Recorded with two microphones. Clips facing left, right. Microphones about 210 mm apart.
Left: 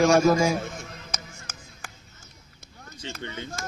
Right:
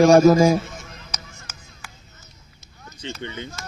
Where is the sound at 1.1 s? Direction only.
50° left (ahead or behind).